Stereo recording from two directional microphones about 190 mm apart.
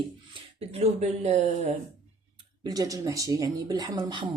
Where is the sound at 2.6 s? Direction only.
20° right (ahead or behind).